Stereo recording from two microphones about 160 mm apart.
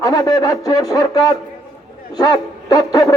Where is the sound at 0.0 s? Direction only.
20° left (ahead or behind).